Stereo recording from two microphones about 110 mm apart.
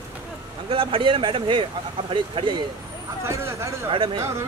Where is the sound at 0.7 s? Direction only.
55° right (ahead or behind).